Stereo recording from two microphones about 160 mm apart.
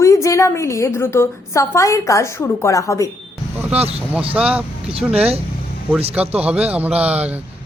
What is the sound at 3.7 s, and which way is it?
Speech, 40° right (ahead or behind).